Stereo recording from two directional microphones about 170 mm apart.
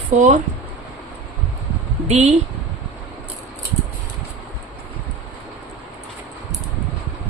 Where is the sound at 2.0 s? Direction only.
40° right (ahead or behind).